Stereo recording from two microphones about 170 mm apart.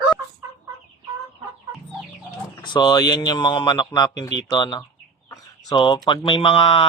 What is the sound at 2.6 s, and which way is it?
Speech, 25° left (ahead or behind).